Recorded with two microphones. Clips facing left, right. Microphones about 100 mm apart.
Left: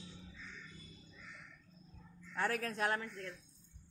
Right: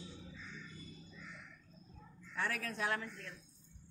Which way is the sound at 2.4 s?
40° left (ahead or behind).